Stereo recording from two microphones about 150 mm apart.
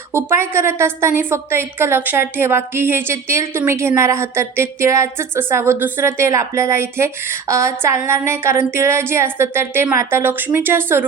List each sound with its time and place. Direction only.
0.1 s a woman's voice: 15° right (ahead or behind)